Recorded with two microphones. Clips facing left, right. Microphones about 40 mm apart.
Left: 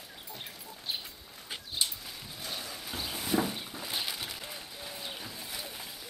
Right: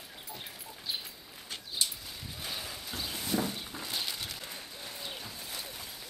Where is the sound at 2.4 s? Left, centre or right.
Centre.